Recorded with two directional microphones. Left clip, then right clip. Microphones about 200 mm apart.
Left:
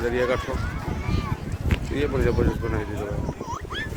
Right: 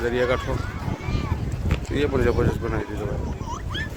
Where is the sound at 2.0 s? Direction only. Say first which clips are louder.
Right 2 dB; 15° right (ahead or behind).